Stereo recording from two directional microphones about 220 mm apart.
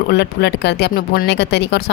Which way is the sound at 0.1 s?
50° left (ahead or behind).